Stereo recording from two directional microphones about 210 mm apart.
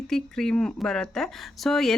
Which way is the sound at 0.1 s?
5° left (ahead or behind).